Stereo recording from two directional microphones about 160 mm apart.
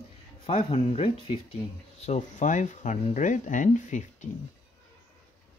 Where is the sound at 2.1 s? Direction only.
50° left (ahead or behind).